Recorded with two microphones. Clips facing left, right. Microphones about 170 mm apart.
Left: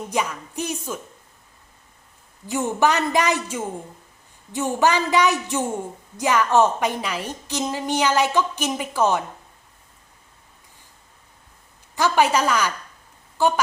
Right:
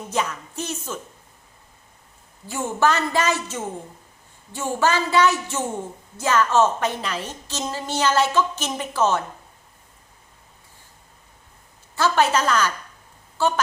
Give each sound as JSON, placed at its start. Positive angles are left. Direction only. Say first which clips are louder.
{"t": 0.1, "sound": "a woman's voice", "louder": "right 1 dB", "side_deg": 10}
{"t": 2.5, "sound": "a woman's voice", "louder": "left 1 dB", "side_deg": 15}
{"t": 11.9, "sound": "a woman's voice", "louder": "left 1 dB", "side_deg": 15}